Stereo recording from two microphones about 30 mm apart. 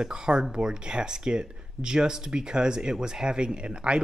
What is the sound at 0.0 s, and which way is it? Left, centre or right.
Speech, right.